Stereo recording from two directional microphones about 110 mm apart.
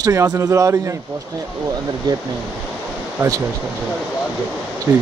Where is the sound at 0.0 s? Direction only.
30° right (ahead or behind).